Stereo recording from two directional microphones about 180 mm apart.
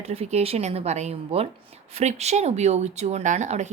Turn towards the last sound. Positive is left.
turn(degrees=-40)  # may be behind; listen again after turning